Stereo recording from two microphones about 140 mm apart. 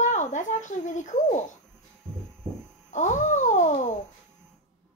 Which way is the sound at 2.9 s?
60° left (ahead or behind).